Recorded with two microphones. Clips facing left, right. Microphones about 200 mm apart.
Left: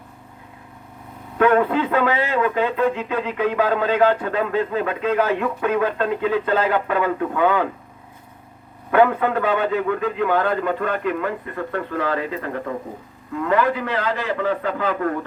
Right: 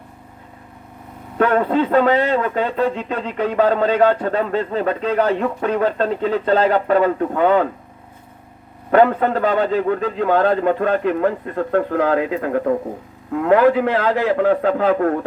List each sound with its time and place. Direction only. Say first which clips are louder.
1.4 s a man's voice: right 1 dB; 35° right (ahead or behind)
8.9 s a man's voice: right 3 dB; 35° right (ahead or behind)